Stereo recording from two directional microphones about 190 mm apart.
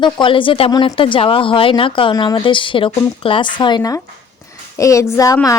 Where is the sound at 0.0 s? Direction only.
25° left (ahead or behind).